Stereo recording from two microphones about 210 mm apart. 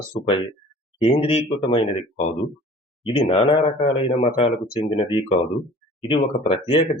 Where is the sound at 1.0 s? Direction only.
25° left (ahead or behind).